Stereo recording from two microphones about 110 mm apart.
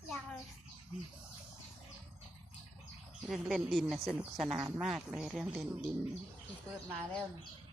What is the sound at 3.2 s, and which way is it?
Speech, centre (ahead or behind).